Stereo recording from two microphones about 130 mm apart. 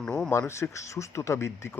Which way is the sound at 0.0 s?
5° left (ahead or behind).